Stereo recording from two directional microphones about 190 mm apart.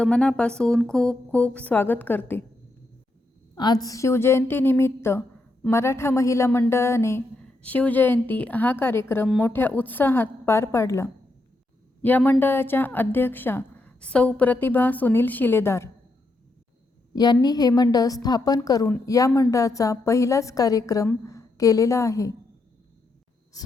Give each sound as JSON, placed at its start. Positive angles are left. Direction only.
{"t": 0.0, "sound": "speech", "side_deg": 5}
{"t": 3.5, "sound": "a woman's voice", "side_deg": 20}
{"t": 17.4, "sound": "a woman's voice", "side_deg": 20}